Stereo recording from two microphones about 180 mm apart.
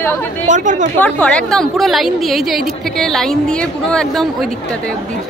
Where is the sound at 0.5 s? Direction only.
45° right (ahead or behind).